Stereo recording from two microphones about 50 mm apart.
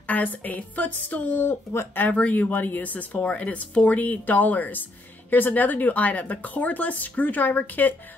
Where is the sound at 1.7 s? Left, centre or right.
Left.